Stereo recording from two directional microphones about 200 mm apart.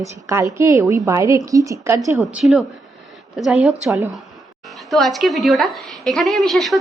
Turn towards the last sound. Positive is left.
turn(degrees=0)  # may be behind; listen again after turning